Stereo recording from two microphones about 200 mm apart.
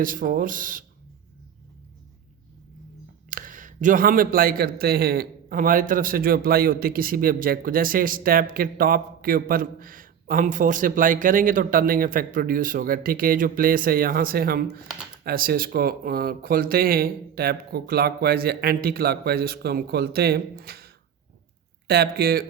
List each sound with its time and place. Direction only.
0.0 s a man's voice: 45° right (ahead or behind)
3.2 s a man's voice: 45° right (ahead or behind)